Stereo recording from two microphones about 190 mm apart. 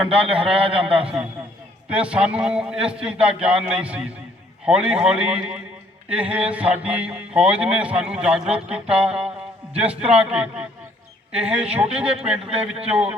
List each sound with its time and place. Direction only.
0.1 s a man's voice: 30° right (ahead or behind)
1.9 s speech: 5° right (ahead or behind)